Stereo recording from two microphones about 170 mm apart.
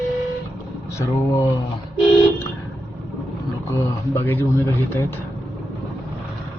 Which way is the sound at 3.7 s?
15° left (ahead or behind).